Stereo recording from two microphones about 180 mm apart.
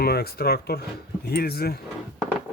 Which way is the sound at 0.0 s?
60° left (ahead or behind).